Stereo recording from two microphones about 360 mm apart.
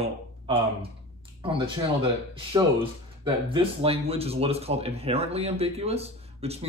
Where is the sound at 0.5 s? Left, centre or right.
Centre.